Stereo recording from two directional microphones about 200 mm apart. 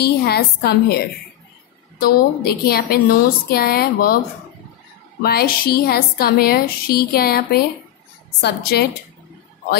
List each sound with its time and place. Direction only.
0.0 s a woman's voice: 55° left (ahead or behind)
5.2 s a woman's voice: 50° left (ahead or behind)